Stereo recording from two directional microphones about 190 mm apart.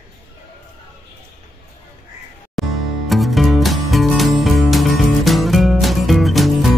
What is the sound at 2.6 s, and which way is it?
Music, centre (ahead or behind).